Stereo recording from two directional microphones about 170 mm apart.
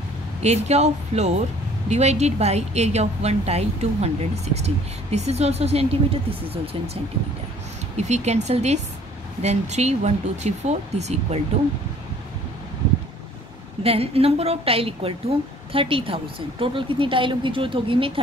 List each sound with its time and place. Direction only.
0.4 s a woman's voice: 40° right (ahead or behind)
8.0 s a woman's voice: 40° right (ahead or behind)
13.8 s a woman's voice: 35° right (ahead or behind)